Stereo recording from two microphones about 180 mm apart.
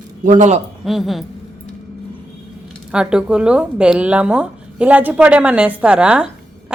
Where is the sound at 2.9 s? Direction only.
5° right (ahead or behind).